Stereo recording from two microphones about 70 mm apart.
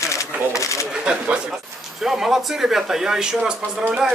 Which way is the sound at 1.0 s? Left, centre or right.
Centre.